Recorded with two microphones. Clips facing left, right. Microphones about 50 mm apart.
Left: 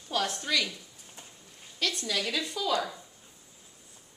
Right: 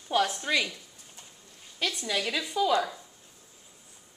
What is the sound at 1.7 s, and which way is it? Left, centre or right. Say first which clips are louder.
A woman's voice: right 1 dB; centre.